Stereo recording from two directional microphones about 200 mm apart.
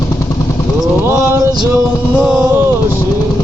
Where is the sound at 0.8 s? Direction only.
15° right (ahead or behind).